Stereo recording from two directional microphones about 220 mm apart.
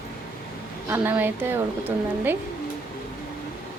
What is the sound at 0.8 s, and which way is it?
A woman's voice, 10° right (ahead or behind).